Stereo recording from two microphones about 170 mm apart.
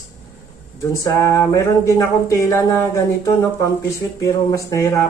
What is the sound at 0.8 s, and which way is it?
Speech, 20° left (ahead or behind).